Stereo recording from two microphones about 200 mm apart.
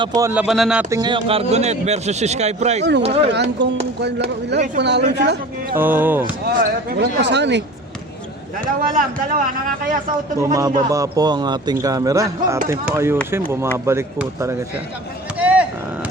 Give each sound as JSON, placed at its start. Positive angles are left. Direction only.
{"t": 0.2, "sound": "a man's voice", "side_deg": -10}
{"t": 0.4, "sound": "speech", "side_deg": 0}
{"t": 0.9, "sound": "speech", "side_deg": -20}
{"t": 3.6, "sound": "speech", "side_deg": -60}
{"t": 5.7, "sound": "a man's voice", "side_deg": -10}
{"t": 6.6, "sound": "speech", "side_deg": -60}
{"t": 8.8, "sound": "a man's voice", "side_deg": -45}
{"t": 10.4, "sound": "a man's voice", "side_deg": -15}
{"t": 15.4, "sound": "vehicle", "side_deg": -5}